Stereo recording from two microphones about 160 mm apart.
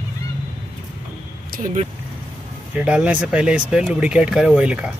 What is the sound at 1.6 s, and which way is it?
Speech, 50° right (ahead or behind).